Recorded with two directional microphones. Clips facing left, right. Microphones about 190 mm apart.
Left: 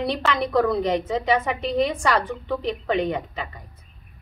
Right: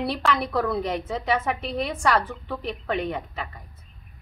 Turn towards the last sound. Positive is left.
turn(degrees=-5)  # may be behind; listen again after turning